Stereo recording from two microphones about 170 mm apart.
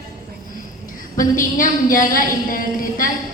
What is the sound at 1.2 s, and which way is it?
A woman's voice, 55° left (ahead or behind).